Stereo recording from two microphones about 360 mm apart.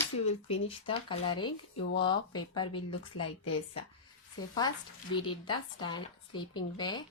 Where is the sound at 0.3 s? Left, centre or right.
Centre.